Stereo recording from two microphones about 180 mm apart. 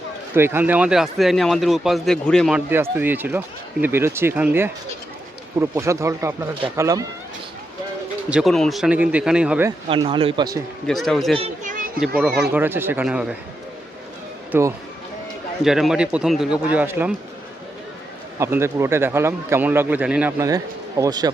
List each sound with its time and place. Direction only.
0.3 s speech: 10° right (ahead or behind); by 2.6 s 5° left (ahead or behind)
2.6 s speech: 10° right (ahead or behind)
8.3 s speech: centre (ahead or behind)
9.9 s speech: 30° right (ahead or behind)
10.8 s speech: centre (ahead or behind)
11.3 s a child's voice: 35° right (ahead or behind)
11.9 s speech: 5° right (ahead or behind)
14.5 s speech: 10° right (ahead or behind)
18.3 s speech: 15° right (ahead or behind)
21.0 s speech: 20° right (ahead or behind)